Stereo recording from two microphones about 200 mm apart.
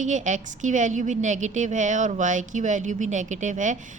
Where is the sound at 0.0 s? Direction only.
35° right (ahead or behind).